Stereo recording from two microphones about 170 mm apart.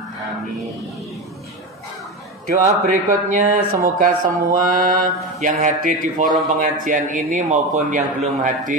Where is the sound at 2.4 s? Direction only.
55° right (ahead or behind).